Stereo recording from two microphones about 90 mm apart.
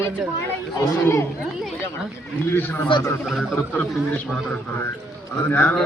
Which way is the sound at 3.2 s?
Centre (ahead or behind).